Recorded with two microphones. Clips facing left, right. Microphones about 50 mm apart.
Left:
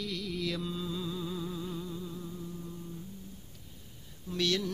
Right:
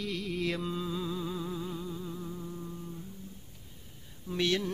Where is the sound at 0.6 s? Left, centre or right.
Right.